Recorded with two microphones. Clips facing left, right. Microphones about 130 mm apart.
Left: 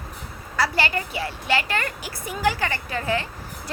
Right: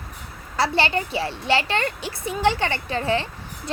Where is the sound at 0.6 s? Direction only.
30° right (ahead or behind).